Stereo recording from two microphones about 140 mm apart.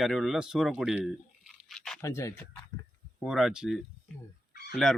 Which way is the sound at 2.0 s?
20° left (ahead or behind).